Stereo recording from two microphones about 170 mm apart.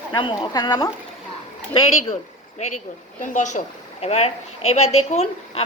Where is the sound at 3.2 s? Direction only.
45° left (ahead or behind).